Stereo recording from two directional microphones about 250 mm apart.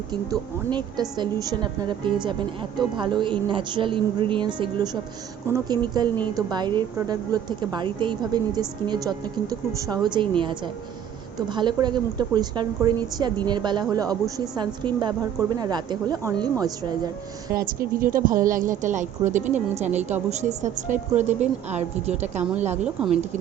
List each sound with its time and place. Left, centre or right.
0.1 s a woman's voice: centre
17.5 s a woman's voice: right
22.8 s speech: centre